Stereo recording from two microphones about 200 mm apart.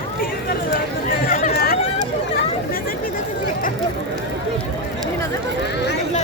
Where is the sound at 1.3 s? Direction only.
45° left (ahead or behind).